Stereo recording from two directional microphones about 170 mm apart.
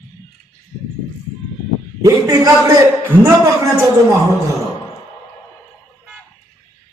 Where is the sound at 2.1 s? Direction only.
20° right (ahead or behind).